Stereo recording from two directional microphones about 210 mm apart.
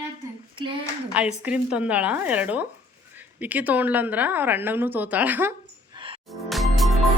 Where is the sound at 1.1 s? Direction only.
5° right (ahead or behind).